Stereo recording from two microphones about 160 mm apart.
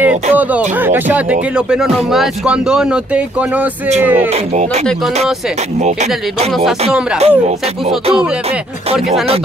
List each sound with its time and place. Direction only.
0.0 s speech: 10° right (ahead or behind)
7.2 s speech: 40° right (ahead or behind)